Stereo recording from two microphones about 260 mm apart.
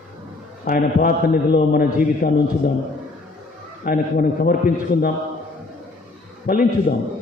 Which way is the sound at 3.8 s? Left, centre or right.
Left.